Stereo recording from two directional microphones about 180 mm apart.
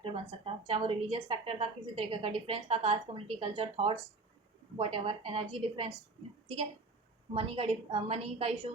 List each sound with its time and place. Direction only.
0.1 s a woman's voice: 30° right (ahead or behind)
7.3 s a woman's voice: 30° right (ahead or behind)